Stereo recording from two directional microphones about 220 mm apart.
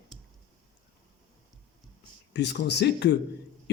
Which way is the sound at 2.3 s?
50° left (ahead or behind).